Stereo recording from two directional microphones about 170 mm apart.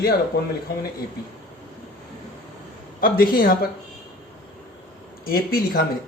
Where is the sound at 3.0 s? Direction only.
60° left (ahead or behind).